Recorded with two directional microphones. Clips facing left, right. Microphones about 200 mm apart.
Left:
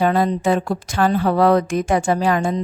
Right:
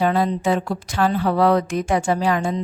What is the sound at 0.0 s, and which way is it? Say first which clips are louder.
Speech: left 2 dB; 45° left (ahead or behind).